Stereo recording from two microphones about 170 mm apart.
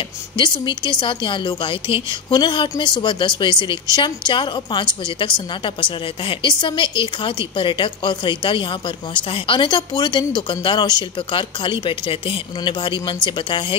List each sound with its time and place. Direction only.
0.4 s a woman's voice: 25° left (ahead or behind)